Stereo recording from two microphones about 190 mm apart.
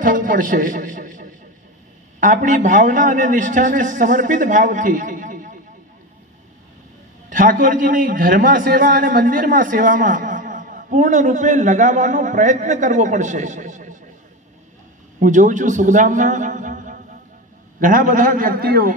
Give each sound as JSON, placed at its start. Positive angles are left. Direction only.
{"t": 0.0, "sound": "a man's voice", "side_deg": -45}
{"t": 7.2, "sound": "a man's voice", "side_deg": -45}
{"t": 15.1, "sound": "a man's voice", "side_deg": -40}